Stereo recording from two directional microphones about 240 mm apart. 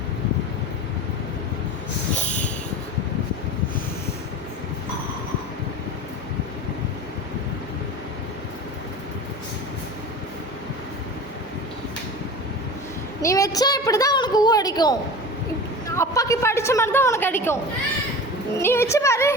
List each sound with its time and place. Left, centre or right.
2.1 s a sound: left
13.2 s a woman's voice: centre
16.0 s a woman's voice: centre
18.6 s a woman's voice: centre